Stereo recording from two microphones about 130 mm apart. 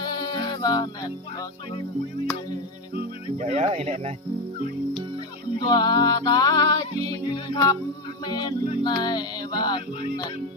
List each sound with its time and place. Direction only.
0.0 s music: 35° left (ahead or behind)
3.3 s speech: 60° right (ahead or behind)
5.5 s music: 35° left (ahead or behind)